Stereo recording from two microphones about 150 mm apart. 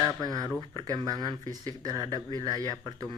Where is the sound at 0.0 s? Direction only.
25° right (ahead or behind).